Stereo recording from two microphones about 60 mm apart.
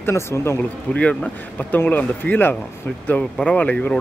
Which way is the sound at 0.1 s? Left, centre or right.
Left.